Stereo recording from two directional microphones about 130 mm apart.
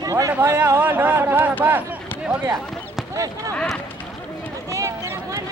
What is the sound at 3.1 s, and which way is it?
Basketball bounce, 25° right (ahead or behind).